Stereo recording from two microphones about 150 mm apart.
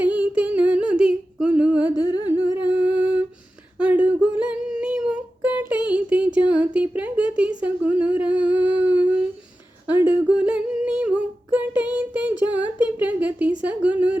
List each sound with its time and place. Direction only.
0.0 s humming: 10° right (ahead or behind)
2.0 s humming: 25° left (ahead or behind)
2.2 s humming: 10° right (ahead or behind)
3.8 s a sound: 10° right (ahead or behind)
4.4 s humming: 5° right (ahead or behind)
6.7 s speech: 10° right (ahead or behind)
7.6 s humming: 10° right (ahead or behind)